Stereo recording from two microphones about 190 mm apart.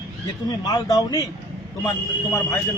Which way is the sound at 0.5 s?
20° left (ahead or behind).